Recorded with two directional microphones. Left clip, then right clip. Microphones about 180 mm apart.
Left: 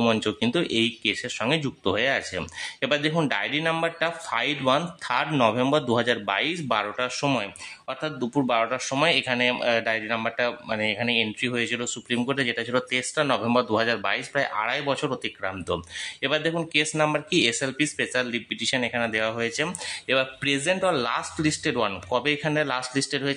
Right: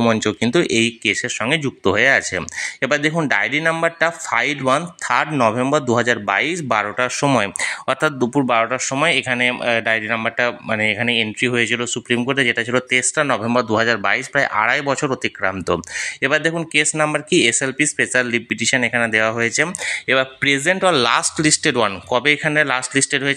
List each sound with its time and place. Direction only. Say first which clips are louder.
0.0 s speech: right 6 dB; 30° right (ahead or behind)
1.4 s speech: right 3 dB; 15° right (ahead or behind)
1.9 s speech: right 9 dB; 30° right (ahead or behind)
7.3 s speech: right 11 dB; 45° right (ahead or behind)
8.2 s speech: right 7 dB; 25° right (ahead or behind)